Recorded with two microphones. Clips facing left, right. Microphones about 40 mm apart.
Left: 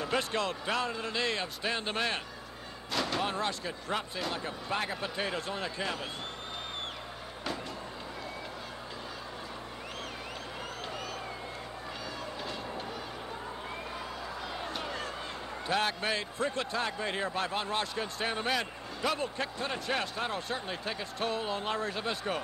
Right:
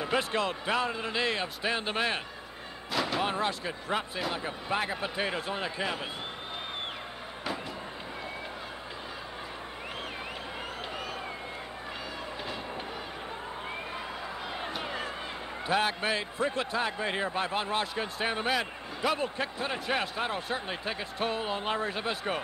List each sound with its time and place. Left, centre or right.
0.0 s a man's voice: centre
14.7 s a sound: centre
15.6 s a man's voice: centre